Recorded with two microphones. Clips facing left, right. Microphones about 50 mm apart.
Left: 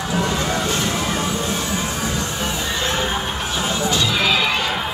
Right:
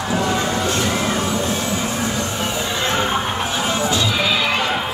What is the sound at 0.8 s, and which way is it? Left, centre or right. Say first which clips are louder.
Music: right 2 dB; centre.